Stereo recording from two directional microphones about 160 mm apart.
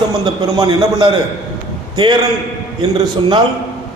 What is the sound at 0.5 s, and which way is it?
Speech, 20° right (ahead or behind).